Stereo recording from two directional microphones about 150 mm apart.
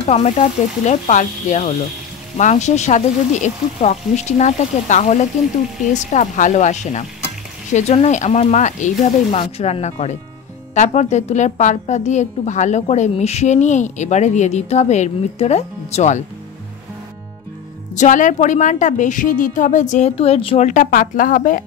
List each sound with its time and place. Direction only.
0.1 s a woman's voice: 45° left (ahead or behind)
17.9 s a woman's voice: 55° left (ahead or behind); by 20.6 s 40° left (ahead or behind)
20.6 s a woman's voice: 60° left (ahead or behind)